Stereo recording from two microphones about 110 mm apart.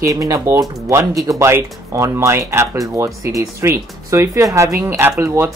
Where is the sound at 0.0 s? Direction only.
30° right (ahead or behind).